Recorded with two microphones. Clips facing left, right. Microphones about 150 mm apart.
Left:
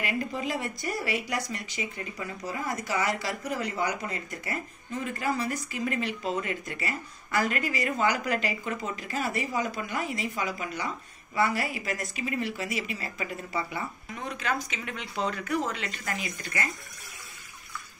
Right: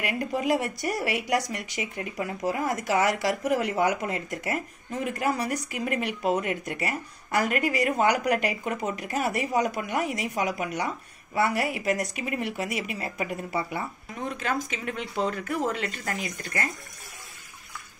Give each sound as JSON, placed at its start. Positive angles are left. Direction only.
{"t": 0.0, "sound": "speech", "side_deg": -70}
{"t": 2.1, "sound": "speech", "side_deg": -70}
{"t": 5.0, "sound": "speech", "side_deg": -70}
{"t": 14.3, "sound": "speech", "side_deg": -50}